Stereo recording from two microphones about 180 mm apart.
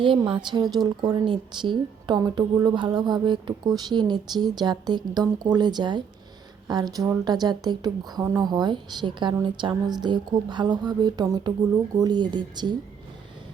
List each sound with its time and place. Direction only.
0.0 s a woman's voice: 30° right (ahead or behind)